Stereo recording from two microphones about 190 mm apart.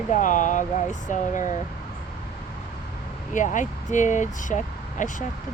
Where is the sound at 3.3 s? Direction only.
40° left (ahead or behind).